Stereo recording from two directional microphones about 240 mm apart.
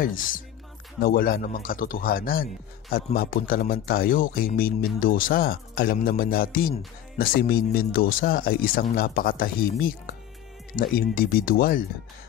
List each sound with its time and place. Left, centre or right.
0.0 s speech: left